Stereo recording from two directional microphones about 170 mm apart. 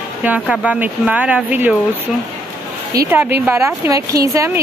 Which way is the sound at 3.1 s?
10° right (ahead or behind).